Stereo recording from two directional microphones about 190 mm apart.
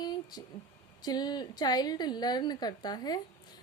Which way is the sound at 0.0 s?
20° left (ahead or behind).